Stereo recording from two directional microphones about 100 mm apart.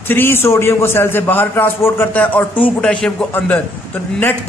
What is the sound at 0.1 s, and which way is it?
A man's voice, 20° left (ahead or behind).